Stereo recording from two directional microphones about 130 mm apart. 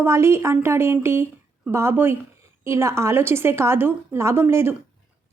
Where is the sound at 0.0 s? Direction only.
20° right (ahead or behind).